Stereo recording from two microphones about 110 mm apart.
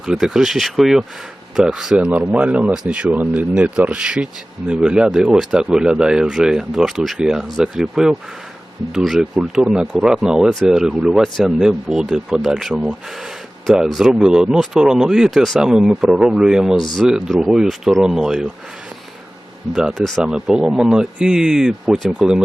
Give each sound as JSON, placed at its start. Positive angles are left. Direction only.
{"t": 0.0, "sound": "speech", "side_deg": -5}
{"t": 16.7, "sound": "speech", "side_deg": 45}
{"t": 17.0, "sound": "speech", "side_deg": -5}
{"t": 19.7, "sound": "speech", "side_deg": -5}